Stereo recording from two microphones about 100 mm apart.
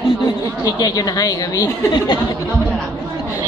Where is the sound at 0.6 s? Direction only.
40° left (ahead or behind).